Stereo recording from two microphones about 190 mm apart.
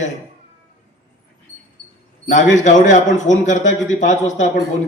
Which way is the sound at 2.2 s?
40° left (ahead or behind).